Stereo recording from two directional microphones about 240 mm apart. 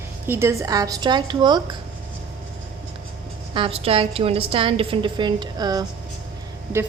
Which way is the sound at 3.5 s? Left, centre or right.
Right.